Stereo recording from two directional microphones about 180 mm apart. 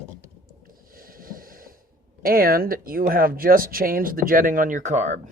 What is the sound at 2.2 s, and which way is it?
Speech, 55° right (ahead or behind).